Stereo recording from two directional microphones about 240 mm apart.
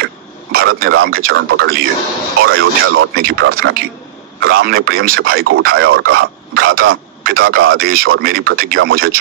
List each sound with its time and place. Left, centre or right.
0.0 s a man's voice: right
3.2 s a man's voice: right